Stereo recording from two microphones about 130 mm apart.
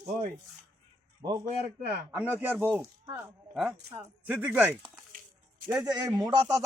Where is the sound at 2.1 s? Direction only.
15° right (ahead or behind).